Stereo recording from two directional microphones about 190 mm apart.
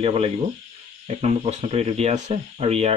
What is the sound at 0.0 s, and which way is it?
Speech, 30° right (ahead or behind).